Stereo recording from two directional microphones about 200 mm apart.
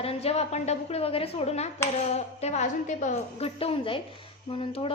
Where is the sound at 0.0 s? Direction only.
30° left (ahead or behind).